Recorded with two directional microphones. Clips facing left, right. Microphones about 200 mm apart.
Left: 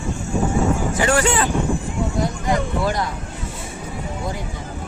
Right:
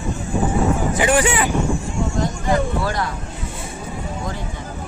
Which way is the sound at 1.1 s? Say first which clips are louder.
Even; 15° right (ahead or behind).